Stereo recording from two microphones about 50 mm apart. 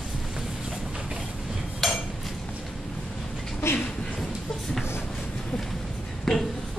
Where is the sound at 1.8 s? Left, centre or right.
Centre.